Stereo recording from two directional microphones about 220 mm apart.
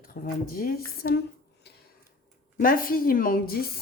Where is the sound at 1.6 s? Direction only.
50° left (ahead or behind).